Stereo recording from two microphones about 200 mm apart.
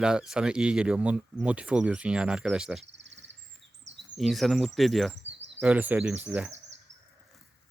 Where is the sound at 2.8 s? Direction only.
60° right (ahead or behind).